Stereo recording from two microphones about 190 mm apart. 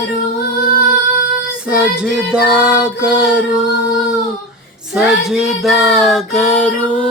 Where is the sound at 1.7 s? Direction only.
5° right (ahead or behind).